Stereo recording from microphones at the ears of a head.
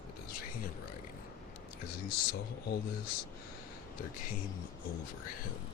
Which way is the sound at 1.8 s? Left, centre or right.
Left.